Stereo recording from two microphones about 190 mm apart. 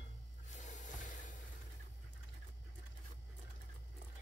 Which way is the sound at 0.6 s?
40° left (ahead or behind).